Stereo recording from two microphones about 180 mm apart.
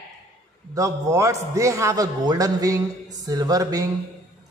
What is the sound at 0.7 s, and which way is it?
A man's voice, 20° right (ahead or behind).